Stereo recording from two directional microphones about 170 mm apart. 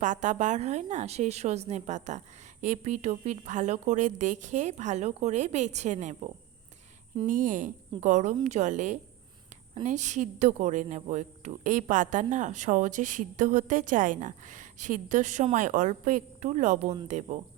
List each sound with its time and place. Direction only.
0.0 s speech: 45° right (ahead or behind)